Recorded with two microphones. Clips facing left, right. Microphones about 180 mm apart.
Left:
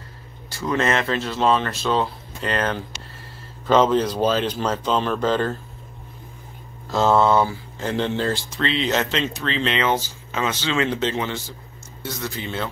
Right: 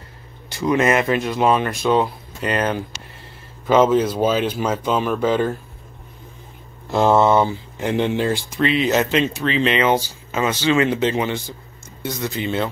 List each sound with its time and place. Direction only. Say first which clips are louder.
0.5 s speech: right 4 dB; 15° right (ahead or behind)
6.9 s speech: right 2 dB; 15° right (ahead or behind)